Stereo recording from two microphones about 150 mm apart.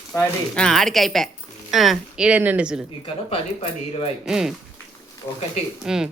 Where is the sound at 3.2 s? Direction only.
40° left (ahead or behind).